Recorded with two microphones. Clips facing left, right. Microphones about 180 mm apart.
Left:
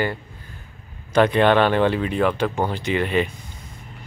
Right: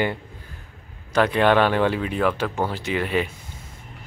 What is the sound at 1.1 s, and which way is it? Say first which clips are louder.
Speech: left 2 dB; 5° right (ahead or behind).